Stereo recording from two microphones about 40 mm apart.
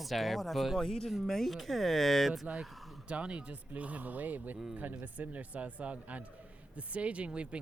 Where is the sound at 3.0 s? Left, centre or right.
Right.